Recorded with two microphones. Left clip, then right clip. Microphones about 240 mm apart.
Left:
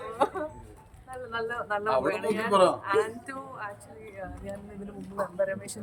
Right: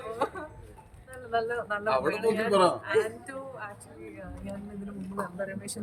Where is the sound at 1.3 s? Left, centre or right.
Centre.